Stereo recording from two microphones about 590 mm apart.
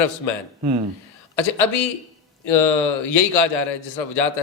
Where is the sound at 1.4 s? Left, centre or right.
Left.